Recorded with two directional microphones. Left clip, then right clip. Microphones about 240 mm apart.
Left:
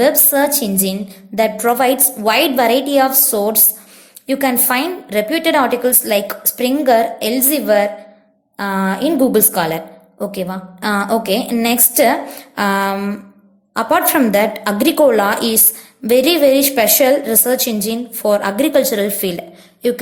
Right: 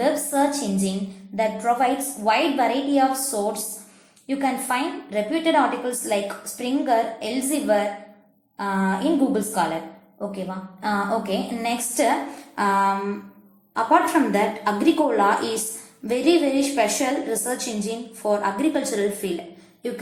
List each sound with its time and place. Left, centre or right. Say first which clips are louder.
0.3 s a woman's voice: left 6 dB; left